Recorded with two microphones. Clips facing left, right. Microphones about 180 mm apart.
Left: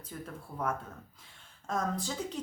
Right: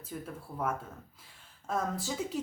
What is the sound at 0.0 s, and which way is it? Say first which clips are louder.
A woman's voice: right 2 dB; 5° right (ahead or behind).